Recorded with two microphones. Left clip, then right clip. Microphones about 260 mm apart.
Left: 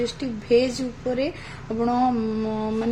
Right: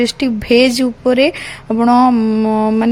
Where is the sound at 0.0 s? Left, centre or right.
Right.